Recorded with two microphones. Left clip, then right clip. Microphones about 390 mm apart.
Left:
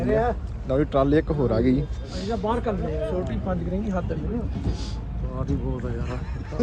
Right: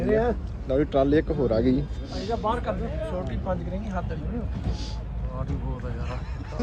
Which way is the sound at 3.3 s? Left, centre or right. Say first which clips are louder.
Left 2 dB; right.